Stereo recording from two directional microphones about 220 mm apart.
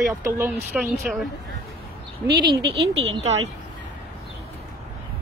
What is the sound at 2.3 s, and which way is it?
Speech, 20° right (ahead or behind).